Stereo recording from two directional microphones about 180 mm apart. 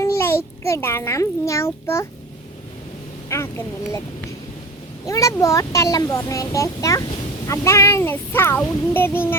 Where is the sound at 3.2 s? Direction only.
15° left (ahead or behind).